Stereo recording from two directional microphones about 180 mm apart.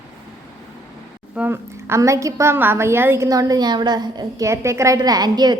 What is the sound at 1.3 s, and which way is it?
A woman's voice, 10° right (ahead or behind).